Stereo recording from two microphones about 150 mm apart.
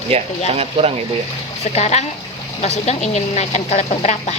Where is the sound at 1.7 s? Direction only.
50° left (ahead or behind).